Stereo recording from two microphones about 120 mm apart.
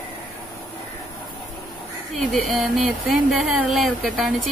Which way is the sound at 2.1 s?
Centre (ahead or behind).